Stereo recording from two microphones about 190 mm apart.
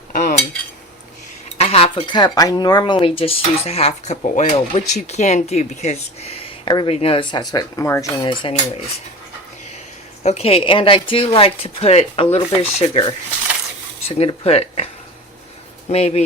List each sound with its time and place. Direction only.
0.1 s cutlery: 45° left (ahead or behind)
1.5 s speech: 30° left (ahead or behind); by 8.3 s 15° left (ahead or behind)
8.3 s speech: 25° left (ahead or behind)
10.2 s speech: 35° left (ahead or behind)
14.2 s speech: 35° left (ahead or behind)
15.9 s speech: 35° left (ahead or behind)